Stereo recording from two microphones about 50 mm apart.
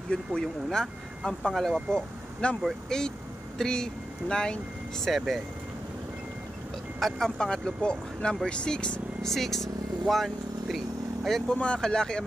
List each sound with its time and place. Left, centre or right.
0.1 s speech: centre
5.0 s speech: centre
7.0 s speech: centre
9.2 s speech: centre
11.5 s speech: centre